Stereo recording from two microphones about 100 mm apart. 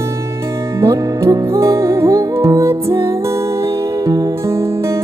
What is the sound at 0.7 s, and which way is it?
Music, 30° right (ahead or behind).